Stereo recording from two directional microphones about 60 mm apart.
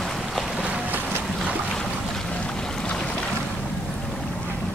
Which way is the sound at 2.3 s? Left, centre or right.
Centre.